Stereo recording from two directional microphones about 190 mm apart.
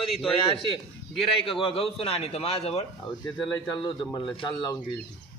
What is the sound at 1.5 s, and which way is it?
A man's voice, 30° left (ahead or behind).